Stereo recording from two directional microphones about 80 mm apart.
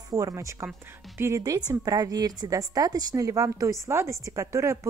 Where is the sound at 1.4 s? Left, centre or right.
Right.